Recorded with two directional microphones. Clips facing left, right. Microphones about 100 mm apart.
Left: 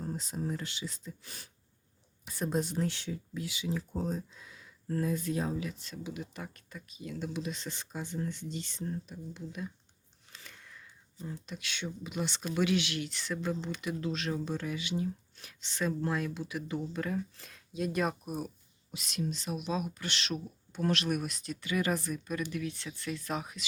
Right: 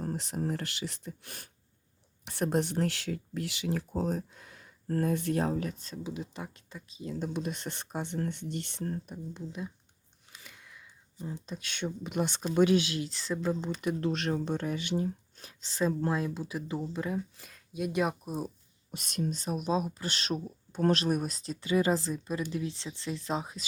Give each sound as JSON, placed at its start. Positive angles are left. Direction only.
{"t": 0.0, "sound": "speech", "side_deg": -60}
{"t": 5.6, "sound": "speech", "side_deg": -35}
{"t": 7.2, "sound": "speech", "side_deg": -50}
{"t": 9.3, "sound": "speech", "side_deg": -25}
{"t": 10.3, "sound": "a sound", "side_deg": -5}
{"t": 11.2, "sound": "speech", "side_deg": -20}
{"t": 12.0, "sound": "speech", "side_deg": -55}
{"t": 12.5, "sound": "speech", "side_deg": -40}
{"t": 14.0, "sound": "speech", "side_deg": -60}
{"t": 17.0, "sound": "speech", "side_deg": -15}
{"t": 18.9, "sound": "speech", "side_deg": -45}